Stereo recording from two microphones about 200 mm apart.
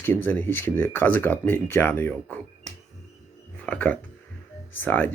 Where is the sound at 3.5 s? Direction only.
5° left (ahead or behind).